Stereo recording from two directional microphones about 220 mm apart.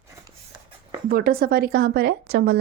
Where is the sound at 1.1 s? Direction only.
40° right (ahead or behind).